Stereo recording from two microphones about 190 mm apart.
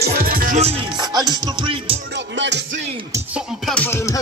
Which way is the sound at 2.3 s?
75° right (ahead or behind).